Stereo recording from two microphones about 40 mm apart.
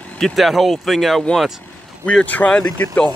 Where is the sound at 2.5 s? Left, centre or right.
Left.